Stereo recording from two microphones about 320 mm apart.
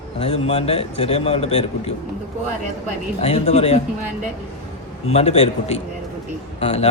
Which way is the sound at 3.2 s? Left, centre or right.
Centre.